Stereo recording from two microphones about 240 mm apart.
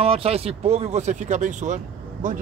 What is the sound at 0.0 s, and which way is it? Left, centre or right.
Speech, right.